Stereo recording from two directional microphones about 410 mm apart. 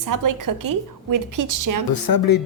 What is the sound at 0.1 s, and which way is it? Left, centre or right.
A woman's voice, right.